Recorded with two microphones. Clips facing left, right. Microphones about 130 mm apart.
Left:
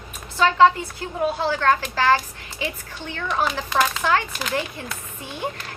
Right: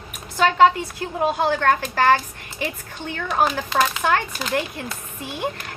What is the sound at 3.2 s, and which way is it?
Speech, 45° right (ahead or behind).